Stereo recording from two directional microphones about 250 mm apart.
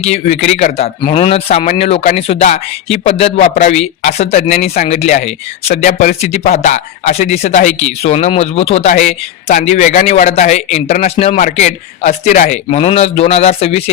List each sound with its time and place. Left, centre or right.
0.0 s speech: left